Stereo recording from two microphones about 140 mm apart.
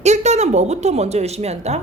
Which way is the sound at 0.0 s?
55° right (ahead or behind).